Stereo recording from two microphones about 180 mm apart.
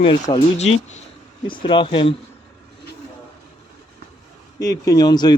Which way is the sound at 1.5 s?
25° left (ahead or behind).